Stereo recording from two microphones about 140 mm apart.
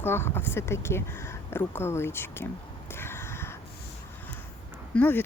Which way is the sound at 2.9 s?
15° left (ahead or behind).